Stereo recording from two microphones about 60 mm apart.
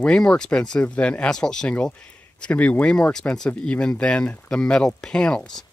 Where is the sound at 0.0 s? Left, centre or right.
Centre.